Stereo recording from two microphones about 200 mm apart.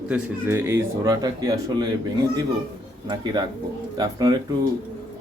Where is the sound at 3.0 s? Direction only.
20° right (ahead or behind).